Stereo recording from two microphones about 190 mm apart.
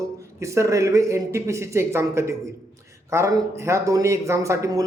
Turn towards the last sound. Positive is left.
turn(degrees=-15)  # may be behind; listen again after turning